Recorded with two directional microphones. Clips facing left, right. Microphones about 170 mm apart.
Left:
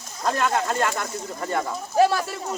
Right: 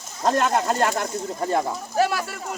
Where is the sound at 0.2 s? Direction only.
40° right (ahead or behind).